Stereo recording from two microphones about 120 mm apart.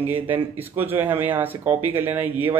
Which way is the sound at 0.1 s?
15° right (ahead or behind).